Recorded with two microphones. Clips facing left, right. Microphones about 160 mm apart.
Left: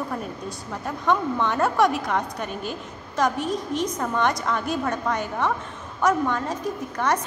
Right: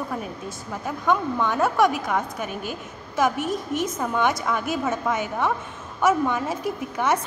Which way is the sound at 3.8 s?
5° right (ahead or behind).